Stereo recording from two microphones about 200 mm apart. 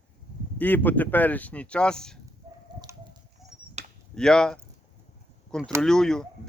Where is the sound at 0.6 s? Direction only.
10° left (ahead or behind).